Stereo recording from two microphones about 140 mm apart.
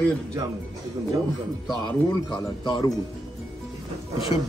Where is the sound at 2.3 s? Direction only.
35° left (ahead or behind).